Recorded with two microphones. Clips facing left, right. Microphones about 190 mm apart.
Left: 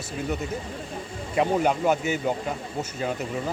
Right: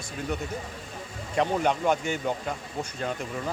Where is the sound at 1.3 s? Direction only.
5° left (ahead or behind).